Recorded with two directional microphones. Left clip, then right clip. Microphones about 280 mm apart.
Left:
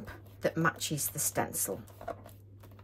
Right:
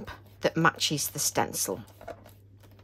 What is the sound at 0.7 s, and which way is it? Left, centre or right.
Speech, centre.